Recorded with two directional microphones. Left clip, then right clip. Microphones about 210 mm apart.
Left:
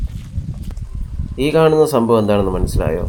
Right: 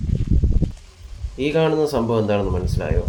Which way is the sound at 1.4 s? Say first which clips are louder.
Left 6 dB; 30° left (ahead or behind).